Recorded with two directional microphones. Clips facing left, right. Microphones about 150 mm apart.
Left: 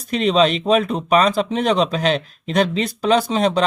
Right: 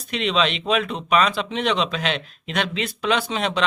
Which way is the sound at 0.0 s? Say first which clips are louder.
Left 6 dB; 40° left (ahead or behind).